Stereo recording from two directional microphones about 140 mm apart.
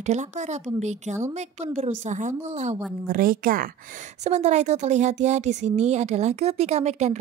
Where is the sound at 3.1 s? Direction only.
85° right.